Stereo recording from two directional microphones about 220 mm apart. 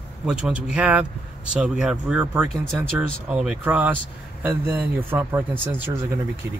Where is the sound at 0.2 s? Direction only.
5° right (ahead or behind).